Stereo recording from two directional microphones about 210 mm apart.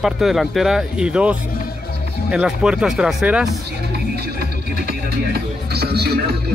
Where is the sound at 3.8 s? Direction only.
50° right (ahead or behind).